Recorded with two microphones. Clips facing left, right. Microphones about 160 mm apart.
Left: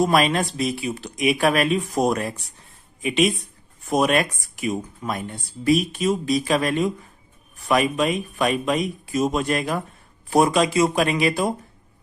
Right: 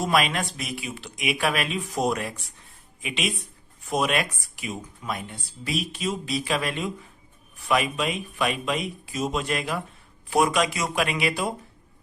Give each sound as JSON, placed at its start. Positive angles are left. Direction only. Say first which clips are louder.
{"t": 0.0, "sound": "speech", "louder": "left 5 dB", "side_deg": 40}